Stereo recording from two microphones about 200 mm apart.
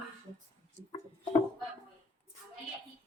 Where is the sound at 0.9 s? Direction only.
20° left (ahead or behind).